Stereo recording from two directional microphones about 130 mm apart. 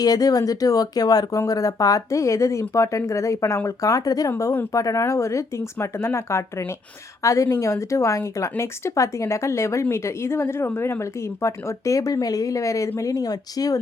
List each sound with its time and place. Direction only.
0.0 s speech: 30° left (ahead or behind)